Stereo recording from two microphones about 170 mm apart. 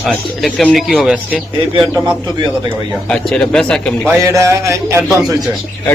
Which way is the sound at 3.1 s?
5° left (ahead or behind).